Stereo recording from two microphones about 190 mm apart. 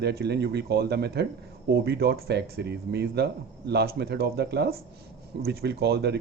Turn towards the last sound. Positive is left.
turn(degrees=-60)  # may be behind; listen again after turning